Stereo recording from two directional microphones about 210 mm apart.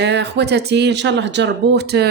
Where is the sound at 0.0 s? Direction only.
55° right (ahead or behind).